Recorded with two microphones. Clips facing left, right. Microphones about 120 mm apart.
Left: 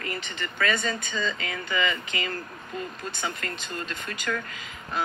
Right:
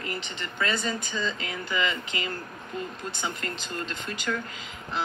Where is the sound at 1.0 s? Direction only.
70° left (ahead or behind).